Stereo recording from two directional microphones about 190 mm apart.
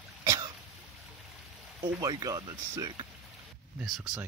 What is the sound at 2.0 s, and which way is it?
Speech, 20° right (ahead or behind).